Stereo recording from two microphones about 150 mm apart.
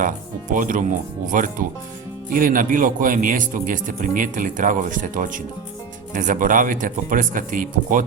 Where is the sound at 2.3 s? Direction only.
65° right (ahead or behind).